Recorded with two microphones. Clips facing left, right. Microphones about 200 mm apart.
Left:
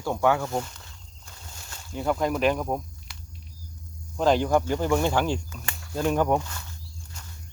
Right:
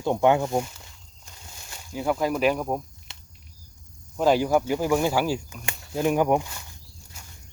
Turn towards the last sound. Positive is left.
turn(degrees=-10)  # may be behind; listen again after turning